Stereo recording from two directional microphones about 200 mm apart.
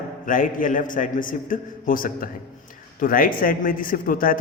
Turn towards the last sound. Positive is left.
turn(degrees=45)  # may be behind; listen again after turning